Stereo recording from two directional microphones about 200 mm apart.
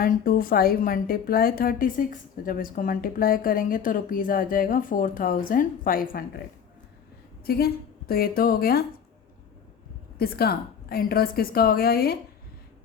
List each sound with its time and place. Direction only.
0.0 s a woman's voice: 45° left (ahead or behind)
7.4 s a woman's voice: 50° left (ahead or behind)
10.2 s a woman's voice: 50° left (ahead or behind)